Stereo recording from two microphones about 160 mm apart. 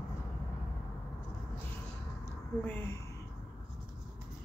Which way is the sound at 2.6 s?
10° left (ahead or behind).